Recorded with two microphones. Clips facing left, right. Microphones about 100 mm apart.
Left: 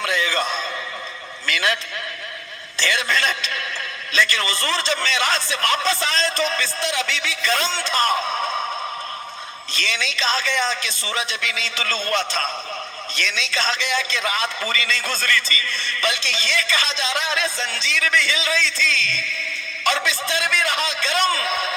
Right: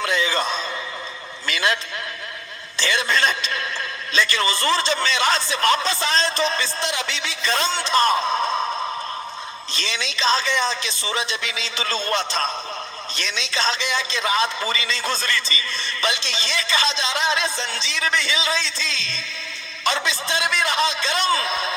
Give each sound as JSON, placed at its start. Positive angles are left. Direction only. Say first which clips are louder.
{"t": 0.0, "sound": "a sound", "louder": "even", "side_deg": -25}
{"t": 2.7, "sound": "a man's voice", "louder": "even", "side_deg": -25}
{"t": 9.7, "sound": "a man's voice", "louder": "left 2 dB", "side_deg": -25}